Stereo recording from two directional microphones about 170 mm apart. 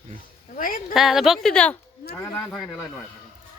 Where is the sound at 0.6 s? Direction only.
55° left (ahead or behind).